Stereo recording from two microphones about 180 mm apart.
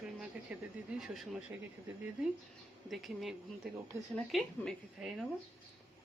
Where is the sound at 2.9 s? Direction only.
Centre (ahead or behind).